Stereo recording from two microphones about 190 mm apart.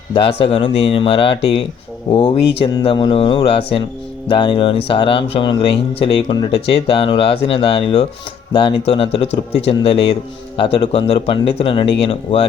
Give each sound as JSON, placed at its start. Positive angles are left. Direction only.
{"t": 0.1, "sound": "speech", "side_deg": 30}